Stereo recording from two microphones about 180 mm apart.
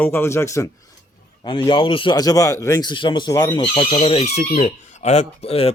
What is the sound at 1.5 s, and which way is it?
A man's voice, 25° left (ahead or behind).